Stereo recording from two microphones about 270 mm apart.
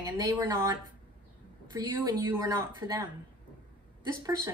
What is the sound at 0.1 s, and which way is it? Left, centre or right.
Speech, centre.